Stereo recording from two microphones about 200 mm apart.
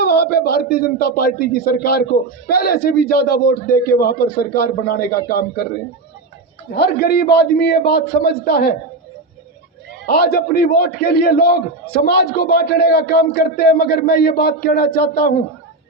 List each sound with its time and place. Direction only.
0.0 s a man's voice: 50° left (ahead or behind)
6.7 s a man's voice: 55° left (ahead or behind)
10.1 s a man's voice: 50° left (ahead or behind)